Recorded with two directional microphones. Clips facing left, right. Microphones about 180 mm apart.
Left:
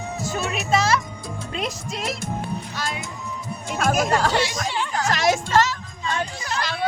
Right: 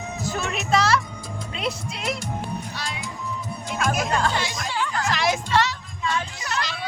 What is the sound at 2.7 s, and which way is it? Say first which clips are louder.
Music: left 3 dB; 50° left (ahead or behind).